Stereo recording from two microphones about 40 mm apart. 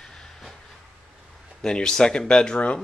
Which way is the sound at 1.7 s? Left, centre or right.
Centre.